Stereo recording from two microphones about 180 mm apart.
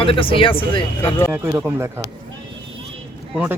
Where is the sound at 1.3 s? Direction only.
10° right (ahead or behind).